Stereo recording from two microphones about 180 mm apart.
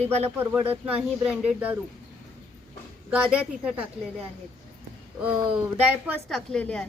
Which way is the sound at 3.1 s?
5° right (ahead or behind).